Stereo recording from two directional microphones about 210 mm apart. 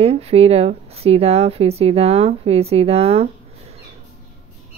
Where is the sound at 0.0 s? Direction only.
30° right (ahead or behind).